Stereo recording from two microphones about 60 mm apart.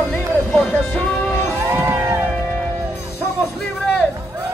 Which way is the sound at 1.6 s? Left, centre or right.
Right.